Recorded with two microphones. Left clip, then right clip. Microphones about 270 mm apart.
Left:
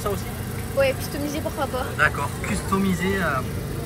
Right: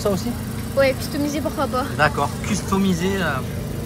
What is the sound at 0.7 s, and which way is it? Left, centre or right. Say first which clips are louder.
Speech: right 3 dB; right.